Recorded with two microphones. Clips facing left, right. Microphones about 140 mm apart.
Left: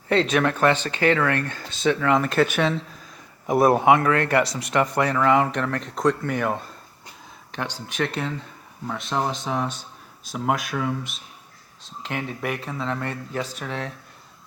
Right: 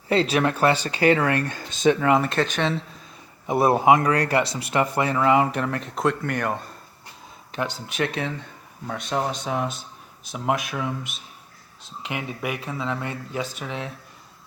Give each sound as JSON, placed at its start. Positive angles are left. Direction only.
{"t": 0.4, "sound": "speech", "side_deg": -10}
{"t": 2.1, "sound": "speech", "side_deg": 0}
{"t": 3.8, "sound": "speech", "side_deg": -35}
{"t": 4.7, "sound": "speech", "side_deg": -5}